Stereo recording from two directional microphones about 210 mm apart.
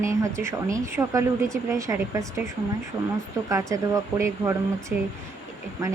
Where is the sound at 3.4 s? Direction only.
15° right (ahead or behind).